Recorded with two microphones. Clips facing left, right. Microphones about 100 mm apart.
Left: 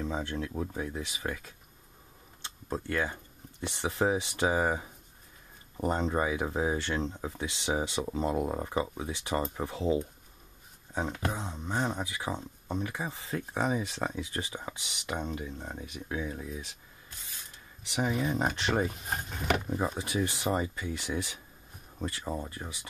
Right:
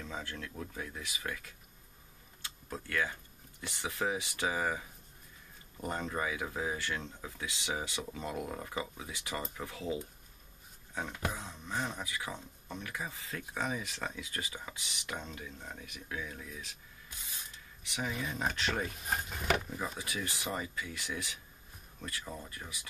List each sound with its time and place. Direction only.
0.0 s speech: 25° left (ahead or behind)
17.9 s speech: 30° left (ahead or behind)
19.0 s speech: centre (ahead or behind)
19.7 s speech: 30° left (ahead or behind)